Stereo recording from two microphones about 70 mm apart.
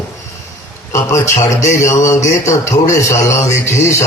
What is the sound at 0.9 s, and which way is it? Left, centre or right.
Speech, left.